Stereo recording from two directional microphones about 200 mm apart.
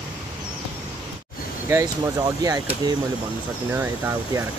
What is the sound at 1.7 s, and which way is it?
Speech, 15° right (ahead or behind).